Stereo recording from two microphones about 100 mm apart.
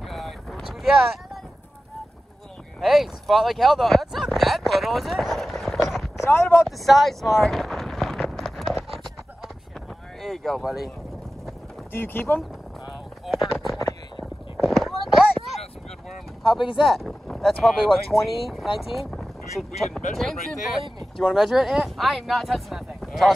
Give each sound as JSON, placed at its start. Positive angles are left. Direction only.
{"t": 0.1, "sound": "a sound", "side_deg": 0}
{"t": 2.8, "sound": "speech", "side_deg": 0}
{"t": 6.1, "sound": "speech", "side_deg": 25}
{"t": 6.9, "sound": "a sound", "side_deg": 0}
{"t": 10.2, "sound": "speech", "side_deg": 0}
{"t": 11.9, "sound": "speech", "side_deg": 25}
{"t": 13.3, "sound": "a sound", "side_deg": 0}
{"t": 16.4, "sound": "speech", "side_deg": 55}
{"t": 16.8, "sound": "speech", "side_deg": 0}
{"t": 19.8, "sound": "speech", "side_deg": 0}